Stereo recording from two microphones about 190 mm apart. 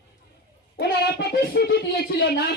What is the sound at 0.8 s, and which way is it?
Speech, 60° left (ahead or behind).